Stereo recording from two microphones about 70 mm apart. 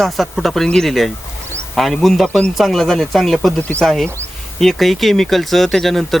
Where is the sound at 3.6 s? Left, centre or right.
Left.